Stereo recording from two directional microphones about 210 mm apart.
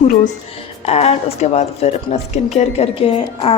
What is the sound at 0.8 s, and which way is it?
A woman's voice, 30° left (ahead or behind).